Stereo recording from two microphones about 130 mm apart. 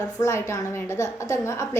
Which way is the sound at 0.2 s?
20° left (ahead or behind).